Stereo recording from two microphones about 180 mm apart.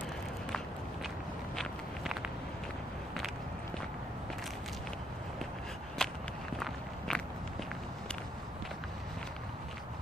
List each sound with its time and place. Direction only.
6.0 s walk: 5° left (ahead or behind)